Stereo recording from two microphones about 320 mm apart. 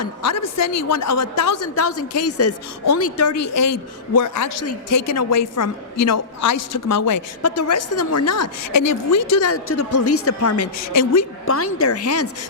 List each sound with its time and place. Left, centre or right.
0.0 s a woman's voice: left